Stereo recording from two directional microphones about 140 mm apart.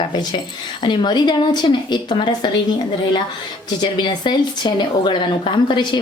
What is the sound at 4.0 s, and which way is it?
A woman's voice, 35° left (ahead or behind).